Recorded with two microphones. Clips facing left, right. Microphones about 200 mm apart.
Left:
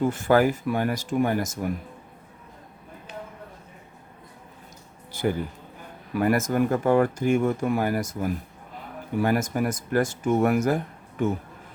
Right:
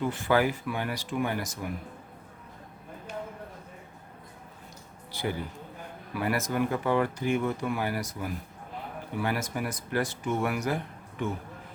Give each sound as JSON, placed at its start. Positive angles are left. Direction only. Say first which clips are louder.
{"t": 0.0, "sound": "speech", "louder": "left 5 dB", "side_deg": 45}
{"t": 5.1, "sound": "a man's voice", "louder": "left 6 dB", "side_deg": 45}